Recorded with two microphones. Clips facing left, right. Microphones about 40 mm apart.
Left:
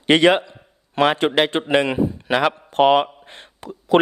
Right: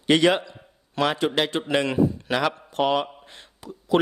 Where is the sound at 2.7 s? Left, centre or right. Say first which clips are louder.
Left 10 dB; left.